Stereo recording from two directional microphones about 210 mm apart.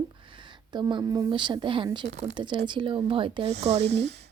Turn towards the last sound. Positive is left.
turn(degrees=-30)  # may be behind; listen again after turning